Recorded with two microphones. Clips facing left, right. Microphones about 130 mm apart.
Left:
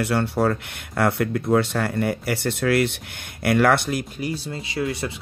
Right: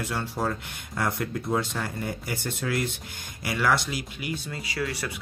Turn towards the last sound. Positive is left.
turn(degrees=25)  # may be behind; listen again after turning